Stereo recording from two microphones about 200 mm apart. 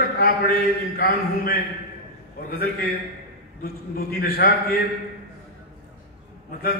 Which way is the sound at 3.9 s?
45° left (ahead or behind).